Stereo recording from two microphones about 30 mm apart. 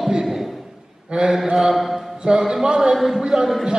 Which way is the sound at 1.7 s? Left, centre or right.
Centre.